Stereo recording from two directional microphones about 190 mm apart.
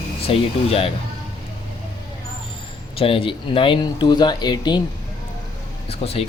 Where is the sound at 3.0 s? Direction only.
30° left (ahead or behind).